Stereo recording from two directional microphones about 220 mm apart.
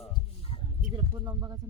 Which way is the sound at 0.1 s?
25° left (ahead or behind).